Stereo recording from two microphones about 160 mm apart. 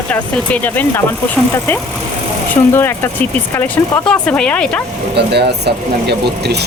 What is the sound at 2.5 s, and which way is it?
Speech, 15° left (ahead or behind).